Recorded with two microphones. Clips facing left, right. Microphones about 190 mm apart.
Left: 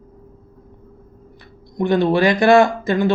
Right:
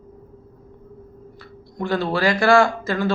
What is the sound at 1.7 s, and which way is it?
Speech, 20° left (ahead or behind).